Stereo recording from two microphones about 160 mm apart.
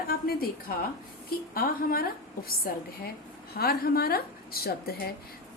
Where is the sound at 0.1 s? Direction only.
70° left (ahead or behind).